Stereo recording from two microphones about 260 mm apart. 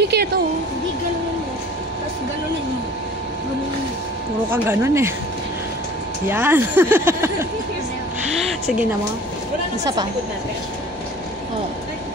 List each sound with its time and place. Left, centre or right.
0.0 s a sound: right
4.5 s speech: centre
6.2 s speech: centre